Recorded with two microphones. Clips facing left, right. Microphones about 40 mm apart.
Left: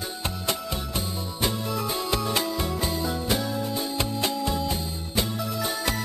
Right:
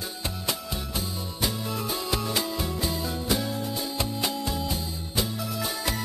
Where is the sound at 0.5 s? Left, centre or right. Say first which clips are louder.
Left 3 dB; centre.